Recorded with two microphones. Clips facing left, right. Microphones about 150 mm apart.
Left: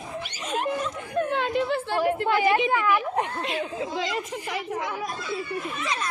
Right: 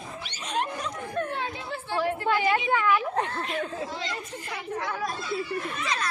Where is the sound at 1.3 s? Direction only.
80° left.